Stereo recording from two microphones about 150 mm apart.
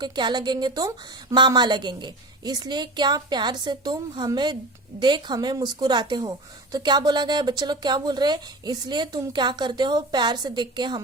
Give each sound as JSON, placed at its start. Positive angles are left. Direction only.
{"t": 0.0, "sound": "a woman's voice", "side_deg": -30}